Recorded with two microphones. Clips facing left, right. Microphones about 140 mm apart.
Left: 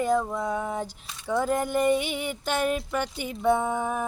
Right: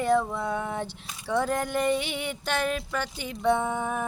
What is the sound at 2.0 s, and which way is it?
Speech, 50° left (ahead or behind).